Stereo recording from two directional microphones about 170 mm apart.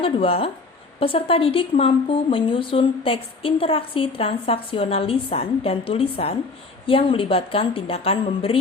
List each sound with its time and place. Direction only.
0.0 s speech: 35° left (ahead or behind)